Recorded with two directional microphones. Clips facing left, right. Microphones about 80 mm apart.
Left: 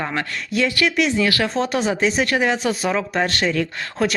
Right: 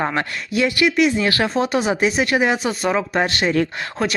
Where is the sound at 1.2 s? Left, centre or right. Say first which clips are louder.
Even; right.